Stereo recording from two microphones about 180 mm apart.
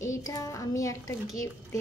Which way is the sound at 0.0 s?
15° left (ahead or behind).